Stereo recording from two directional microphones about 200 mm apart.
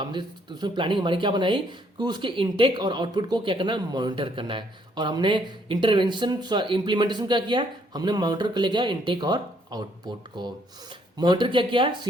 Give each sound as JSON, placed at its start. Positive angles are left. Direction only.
{"t": 0.0, "sound": "speech", "side_deg": -25}